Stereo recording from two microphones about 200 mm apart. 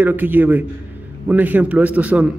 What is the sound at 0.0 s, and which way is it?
A man's voice, 10° right (ahead or behind).